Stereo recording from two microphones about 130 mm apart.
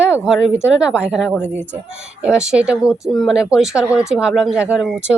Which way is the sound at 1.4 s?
15° left (ahead or behind).